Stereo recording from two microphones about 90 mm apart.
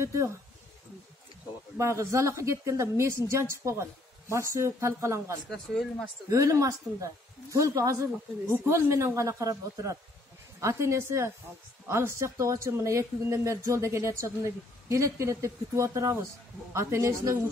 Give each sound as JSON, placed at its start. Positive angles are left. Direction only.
{"t": 0.0, "sound": "speech", "side_deg": -35}
{"t": 1.8, "sound": "speech", "side_deg": -30}
{"t": 5.5, "sound": "speech", "side_deg": 5}
{"t": 6.3, "sound": "speech", "side_deg": -35}